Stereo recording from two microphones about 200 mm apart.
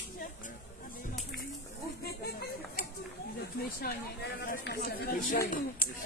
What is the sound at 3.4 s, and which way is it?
Speech, 50° left (ahead or behind).